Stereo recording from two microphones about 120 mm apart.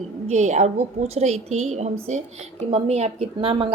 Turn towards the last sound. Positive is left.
turn(degrees=-45)  # may be behind; listen again after turning